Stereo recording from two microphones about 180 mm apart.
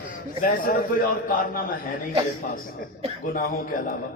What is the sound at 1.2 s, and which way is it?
A man's voice, 50° left (ahead or behind).